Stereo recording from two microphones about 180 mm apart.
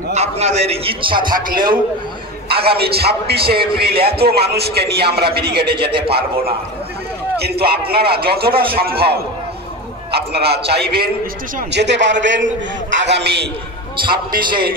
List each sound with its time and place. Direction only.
0.1 s a man's voice: 35° right (ahead or behind)
2.6 s a man's voice: 60° right (ahead or behind)
3.4 s a man's voice: 30° right (ahead or behind)
3.7 s a man's voice: 60° right (ahead or behind)
5.8 s a man's voice: 30° right (ahead or behind)
7.3 s a man's voice: 60° right (ahead or behind)
11.7 s a man's voice: 75° right (ahead or behind)
12.9 s a man's voice: 75° right (ahead or behind)
14.0 s a man's voice: 25° right (ahead or behind)